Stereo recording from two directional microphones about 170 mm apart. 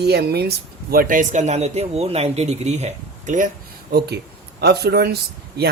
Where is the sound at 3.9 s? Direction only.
70° right (ahead or behind).